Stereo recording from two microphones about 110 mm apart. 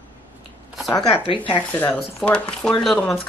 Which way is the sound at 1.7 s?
15° left (ahead or behind).